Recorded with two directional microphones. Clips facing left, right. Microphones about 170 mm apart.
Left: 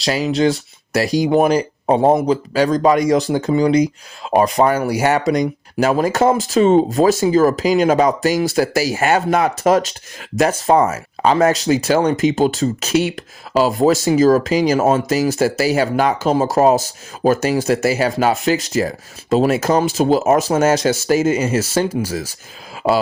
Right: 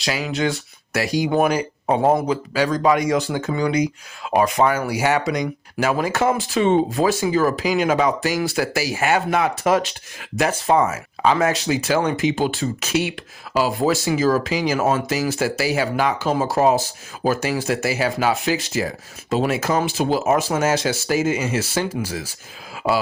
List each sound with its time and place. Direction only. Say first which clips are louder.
0.0 s speech: left 6 dB; 35° left (ahead or behind)
14.8 s speech: left 5 dB; 25° left (ahead or behind)
15.3 s speech: left 5 dB; 45° left (ahead or behind)